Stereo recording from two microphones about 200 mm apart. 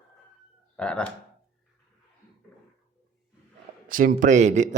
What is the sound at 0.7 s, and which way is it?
Speech, 5° left (ahead or behind).